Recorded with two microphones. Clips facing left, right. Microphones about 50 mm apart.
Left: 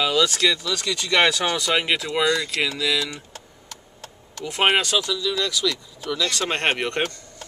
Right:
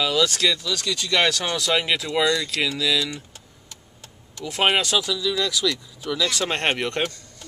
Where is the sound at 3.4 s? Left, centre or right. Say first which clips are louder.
Left 5 dB; left.